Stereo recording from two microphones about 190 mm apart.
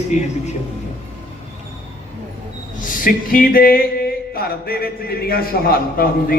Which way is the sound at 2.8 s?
45° left (ahead or behind).